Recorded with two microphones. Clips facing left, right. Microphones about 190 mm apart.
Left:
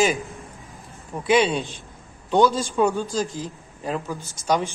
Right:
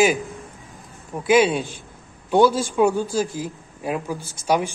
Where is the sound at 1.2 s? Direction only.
Centre (ahead or behind).